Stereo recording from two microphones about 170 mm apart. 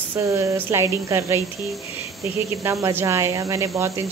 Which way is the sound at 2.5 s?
15° right (ahead or behind).